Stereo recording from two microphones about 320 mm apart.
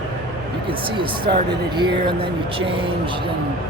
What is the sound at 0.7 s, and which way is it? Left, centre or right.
Speech, centre.